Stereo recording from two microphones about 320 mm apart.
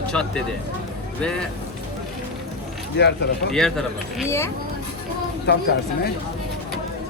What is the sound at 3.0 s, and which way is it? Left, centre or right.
Speech, left.